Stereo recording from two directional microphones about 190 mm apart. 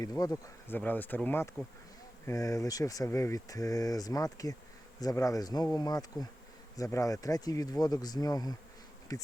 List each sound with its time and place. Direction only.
0.0 s speech: 20° left (ahead or behind)